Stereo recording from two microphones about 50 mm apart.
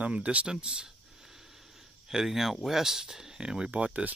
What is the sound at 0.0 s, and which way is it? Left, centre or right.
Speech, right.